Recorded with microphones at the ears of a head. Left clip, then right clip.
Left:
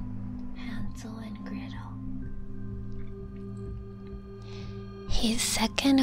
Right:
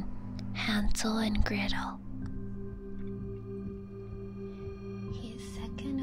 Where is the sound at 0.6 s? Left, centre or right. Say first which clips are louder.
Right 14 dB; right.